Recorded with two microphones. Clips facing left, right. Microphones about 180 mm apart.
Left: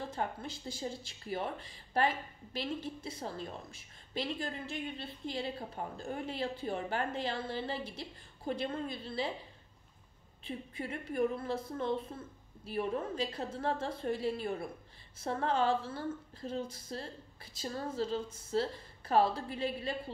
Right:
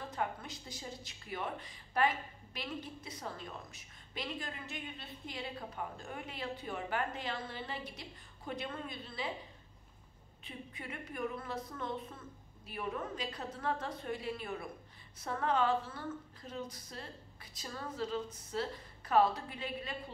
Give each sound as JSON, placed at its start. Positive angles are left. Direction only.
{"t": 0.0, "sound": "speech", "side_deg": 30}
{"t": 10.4, "sound": "a woman's voice", "side_deg": 35}